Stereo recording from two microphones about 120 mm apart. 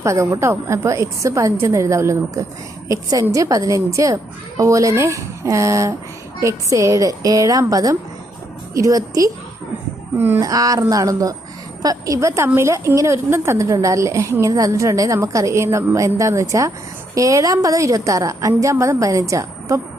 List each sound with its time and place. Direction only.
0.0 s a woman's voice: 25° right (ahead or behind)
10.2 s speech: 20° right (ahead or behind)
10.4 s a woman's voice: 30° right (ahead or behind)